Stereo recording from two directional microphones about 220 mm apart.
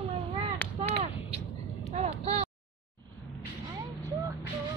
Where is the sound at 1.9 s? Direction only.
30° right (ahead or behind).